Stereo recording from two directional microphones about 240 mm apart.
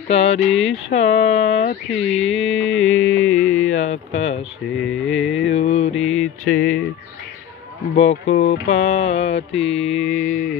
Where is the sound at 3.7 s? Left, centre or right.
Left.